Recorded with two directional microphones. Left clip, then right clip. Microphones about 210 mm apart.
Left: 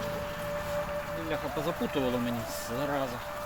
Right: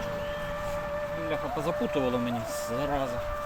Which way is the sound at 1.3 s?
15° right (ahead or behind).